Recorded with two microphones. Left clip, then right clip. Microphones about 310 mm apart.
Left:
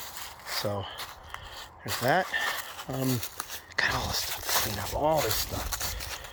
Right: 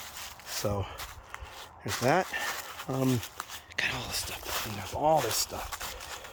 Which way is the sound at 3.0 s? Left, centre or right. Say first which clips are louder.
Right 1 dB; left.